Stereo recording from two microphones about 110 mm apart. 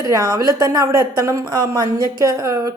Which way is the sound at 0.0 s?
30° right (ahead or behind).